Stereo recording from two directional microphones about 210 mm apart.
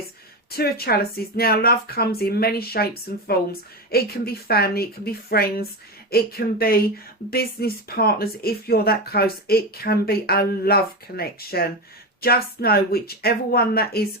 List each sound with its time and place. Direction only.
0.5 s speech: 45° left (ahead or behind)